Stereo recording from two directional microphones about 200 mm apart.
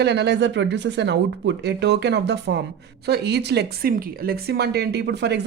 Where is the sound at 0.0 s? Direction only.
60° right (ahead or behind).